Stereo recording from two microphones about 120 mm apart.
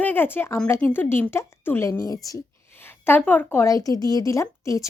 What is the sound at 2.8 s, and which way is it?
A woman's voice, 15° left (ahead or behind).